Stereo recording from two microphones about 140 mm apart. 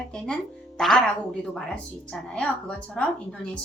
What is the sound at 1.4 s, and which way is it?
A woman's voice, 5° left (ahead or behind).